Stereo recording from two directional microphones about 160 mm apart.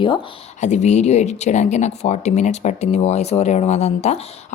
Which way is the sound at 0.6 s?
45° left (ahead or behind).